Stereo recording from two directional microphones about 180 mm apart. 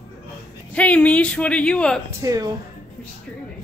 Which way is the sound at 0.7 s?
5° left (ahead or behind).